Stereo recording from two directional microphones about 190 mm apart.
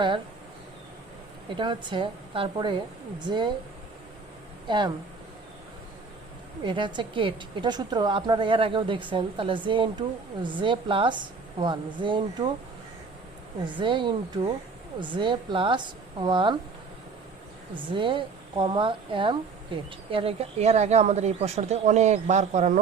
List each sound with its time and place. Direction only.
1.5 s a woman's voice: 25° right (ahead or behind)
6.7 s a woman's voice: 25° right (ahead or behind)
13.7 s a woman's voice: 25° right (ahead or behind)
17.9 s a woman's voice: 25° right (ahead or behind)